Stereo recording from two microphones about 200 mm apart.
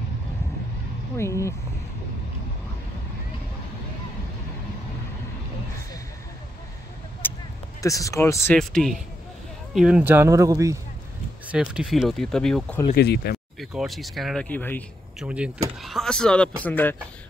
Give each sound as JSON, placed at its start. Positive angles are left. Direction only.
{"t": 1.1, "sound": "speech", "side_deg": 15}
{"t": 7.2, "sound": "a sound", "side_deg": 10}
{"t": 7.8, "sound": "speech", "side_deg": 15}
{"t": 8.5, "sound": "speech", "side_deg": 0}
{"t": 11.5, "sound": "speech", "side_deg": -5}
{"t": 12.9, "sound": "speech", "side_deg": 55}
{"t": 13.6, "sound": "speech", "side_deg": 0}
{"t": 15.1, "sound": "speech", "side_deg": -5}